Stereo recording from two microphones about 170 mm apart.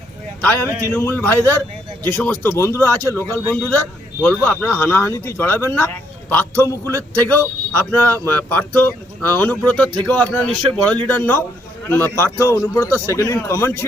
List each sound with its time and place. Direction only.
0.9 s speech: 10° left (ahead or behind)